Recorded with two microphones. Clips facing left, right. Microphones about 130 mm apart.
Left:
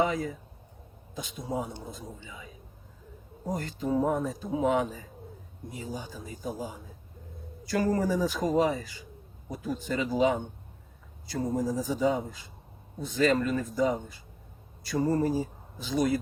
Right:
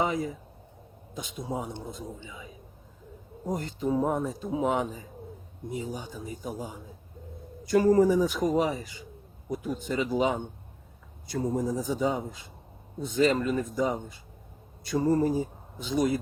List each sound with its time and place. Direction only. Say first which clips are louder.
0.0 s speech: left 1 dB; 20° right (ahead or behind)
3.5 s speech: right 1 dB; 20° right (ahead or behind)